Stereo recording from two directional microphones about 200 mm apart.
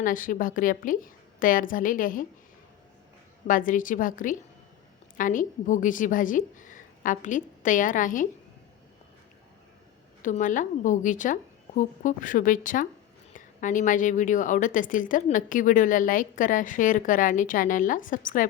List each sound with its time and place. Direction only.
0.0 s a woman's voice: 45° left (ahead or behind)
3.4 s a woman's voice: 40° left (ahead or behind)
10.2 s a woman's voice: 40° left (ahead or behind)